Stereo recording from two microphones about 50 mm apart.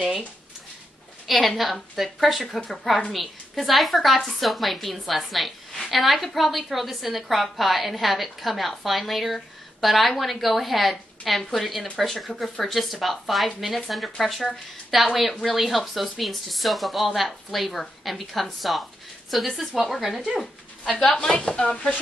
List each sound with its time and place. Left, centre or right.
1.2 s a woman's voice: centre
21.0 s speech: centre